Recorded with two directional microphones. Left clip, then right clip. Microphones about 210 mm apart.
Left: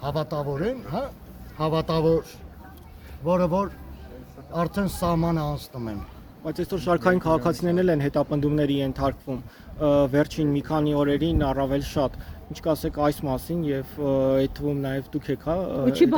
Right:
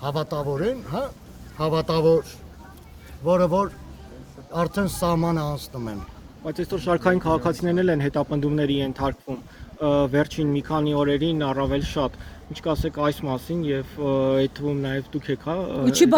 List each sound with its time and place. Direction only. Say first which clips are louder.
0.0 s speech: right 1 dB; 5° right (ahead or behind)
3.2 s speech: right 3 dB; 10° right (ahead or behind)
6.4 s speech: right 1 dB; 5° left (ahead or behind)
15.9 s speech: right 2 dB; 50° right (ahead or behind)